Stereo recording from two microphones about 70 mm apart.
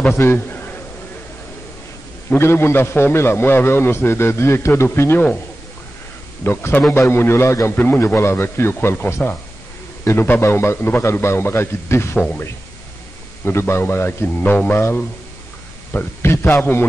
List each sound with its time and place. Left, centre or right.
0.1 s a man's voice: left
2.2 s a man's voice: left
6.4 s a man's voice: left
13.5 s a man's voice: left